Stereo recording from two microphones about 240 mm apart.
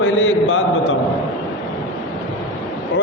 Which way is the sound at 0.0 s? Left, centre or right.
Left.